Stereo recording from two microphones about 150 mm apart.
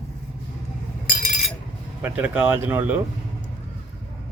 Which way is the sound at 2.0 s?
10° right (ahead or behind).